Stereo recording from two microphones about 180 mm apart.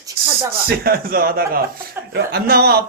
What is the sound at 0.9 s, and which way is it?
A man's voice, 55° right (ahead or behind).